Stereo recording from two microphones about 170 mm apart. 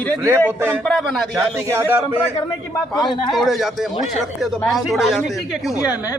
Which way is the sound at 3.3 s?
Centre (ahead or behind).